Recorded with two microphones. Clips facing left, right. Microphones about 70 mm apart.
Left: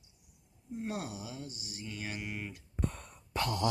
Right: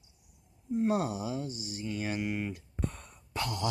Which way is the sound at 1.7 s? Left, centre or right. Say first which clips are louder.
Right 7 dB; centre.